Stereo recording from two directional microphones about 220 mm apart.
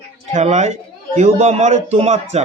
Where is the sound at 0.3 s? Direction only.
30° right (ahead or behind).